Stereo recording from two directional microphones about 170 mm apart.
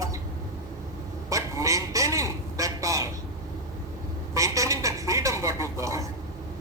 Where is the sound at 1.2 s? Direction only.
20° right (ahead or behind).